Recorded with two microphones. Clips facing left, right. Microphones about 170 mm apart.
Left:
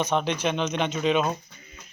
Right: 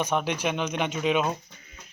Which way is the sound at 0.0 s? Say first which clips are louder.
Left 2 dB; 10° right (ahead or behind).